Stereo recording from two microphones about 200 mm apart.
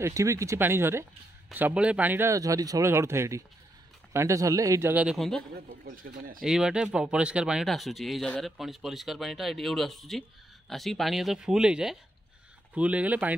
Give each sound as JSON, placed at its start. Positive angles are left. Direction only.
{"t": 0.0, "sound": "a man's voice", "side_deg": -15}
{"t": 5.9, "sound": "speech", "side_deg": -45}
{"t": 6.4, "sound": "a man's voice", "side_deg": -5}